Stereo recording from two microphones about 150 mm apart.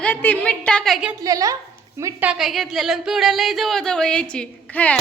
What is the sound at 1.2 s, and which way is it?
A woman's voice, 25° right (ahead or behind).